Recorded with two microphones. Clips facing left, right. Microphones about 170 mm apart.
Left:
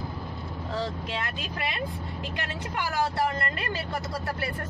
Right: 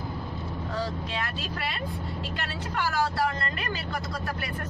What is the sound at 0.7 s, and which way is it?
Speech, 25° left (ahead or behind).